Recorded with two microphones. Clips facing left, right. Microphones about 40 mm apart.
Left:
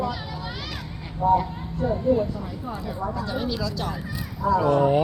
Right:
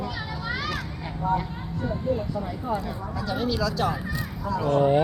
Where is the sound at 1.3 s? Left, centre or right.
Centre.